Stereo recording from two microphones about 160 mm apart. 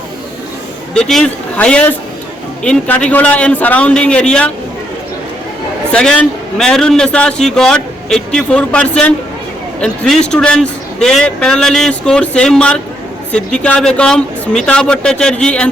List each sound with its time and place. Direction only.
0.9 s a man's voice: 5° left (ahead or behind)
5.9 s a man's voice: 5° left (ahead or behind)